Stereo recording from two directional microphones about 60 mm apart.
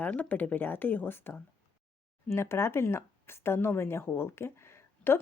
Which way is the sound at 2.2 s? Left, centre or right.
Left.